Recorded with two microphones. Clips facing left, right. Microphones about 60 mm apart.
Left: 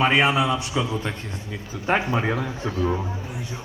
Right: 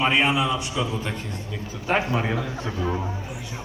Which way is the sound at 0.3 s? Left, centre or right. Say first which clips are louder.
Left 2 dB; left.